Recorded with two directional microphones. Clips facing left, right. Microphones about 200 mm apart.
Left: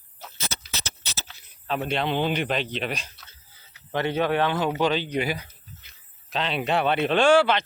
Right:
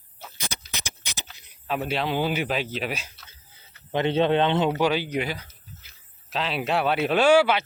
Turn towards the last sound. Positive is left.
turn(degrees=-10)  # may be behind; listen again after turning